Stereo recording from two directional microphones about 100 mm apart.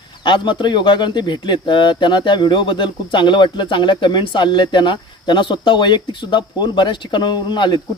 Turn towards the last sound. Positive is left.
turn(degrees=45)  # may be behind; listen again after turning